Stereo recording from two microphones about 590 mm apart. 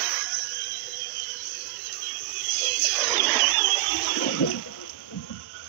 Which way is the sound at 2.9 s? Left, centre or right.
Centre.